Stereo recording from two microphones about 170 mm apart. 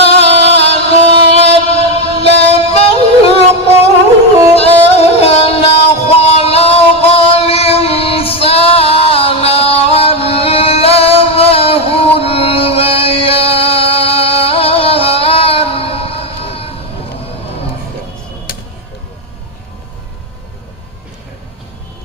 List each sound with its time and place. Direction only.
0.0 s music: 35° left (ahead or behind)
4.5 s music: 35° left (ahead or behind)